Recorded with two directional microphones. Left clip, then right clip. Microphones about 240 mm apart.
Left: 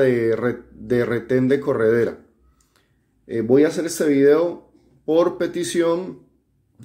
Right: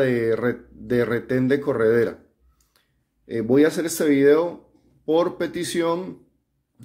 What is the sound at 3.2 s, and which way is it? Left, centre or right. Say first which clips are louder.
Speech: left 2 dB; centre.